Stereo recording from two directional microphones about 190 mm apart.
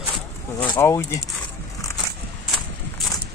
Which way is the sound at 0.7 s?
15° left (ahead or behind).